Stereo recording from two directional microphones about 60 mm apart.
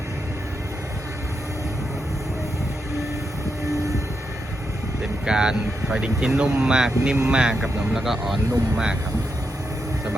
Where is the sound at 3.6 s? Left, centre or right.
Right.